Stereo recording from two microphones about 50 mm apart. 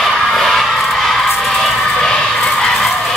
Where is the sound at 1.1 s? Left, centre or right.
Centre.